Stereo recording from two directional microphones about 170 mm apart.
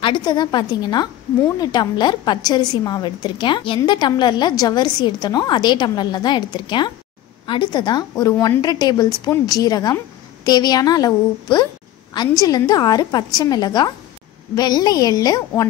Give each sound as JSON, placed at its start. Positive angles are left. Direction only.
{"t": 0.0, "sound": "a woman's voice", "side_deg": 30}